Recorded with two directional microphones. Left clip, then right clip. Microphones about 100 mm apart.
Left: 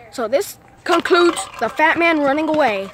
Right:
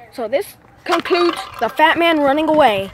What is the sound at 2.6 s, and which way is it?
Speech, 25° right (ahead or behind).